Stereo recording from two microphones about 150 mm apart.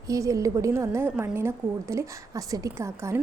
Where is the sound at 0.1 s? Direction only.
20° right (ahead or behind).